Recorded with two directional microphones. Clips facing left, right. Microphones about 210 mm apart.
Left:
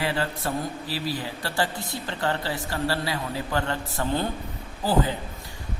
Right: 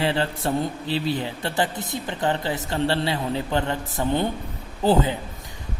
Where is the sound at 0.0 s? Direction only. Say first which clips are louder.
Right 4 dB; 25° right (ahead or behind).